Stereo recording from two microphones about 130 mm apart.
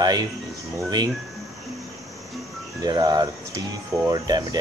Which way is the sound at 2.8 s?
30° right (ahead or behind).